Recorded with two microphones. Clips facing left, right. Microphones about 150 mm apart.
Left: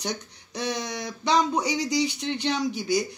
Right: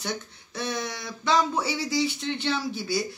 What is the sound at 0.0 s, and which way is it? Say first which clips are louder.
Speech: left 1 dB; 15° left (ahead or behind).